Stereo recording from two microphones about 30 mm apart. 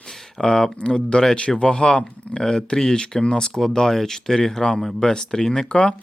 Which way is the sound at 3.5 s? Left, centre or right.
Centre.